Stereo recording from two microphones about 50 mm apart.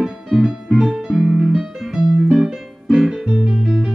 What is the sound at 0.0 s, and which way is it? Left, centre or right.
Music, centre.